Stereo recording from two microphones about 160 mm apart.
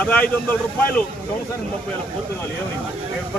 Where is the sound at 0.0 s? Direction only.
10° left (ahead or behind).